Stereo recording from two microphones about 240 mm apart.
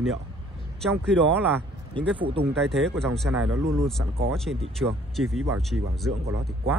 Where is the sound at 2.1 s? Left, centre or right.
Right.